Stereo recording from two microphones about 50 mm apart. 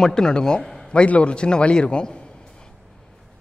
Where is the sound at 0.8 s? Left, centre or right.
Left.